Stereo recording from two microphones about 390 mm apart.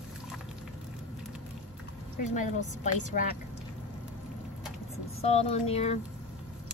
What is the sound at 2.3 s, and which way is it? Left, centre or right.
Speech, centre.